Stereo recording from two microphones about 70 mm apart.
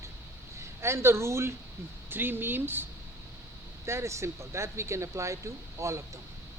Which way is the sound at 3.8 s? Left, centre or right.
Right.